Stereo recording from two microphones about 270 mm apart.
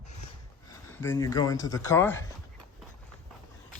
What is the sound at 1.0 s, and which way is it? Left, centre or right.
Speech, centre.